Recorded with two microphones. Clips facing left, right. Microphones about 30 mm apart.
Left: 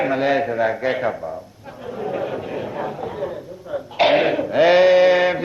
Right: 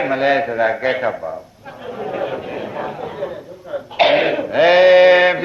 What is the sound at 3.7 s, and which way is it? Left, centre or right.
Throat clearing, centre.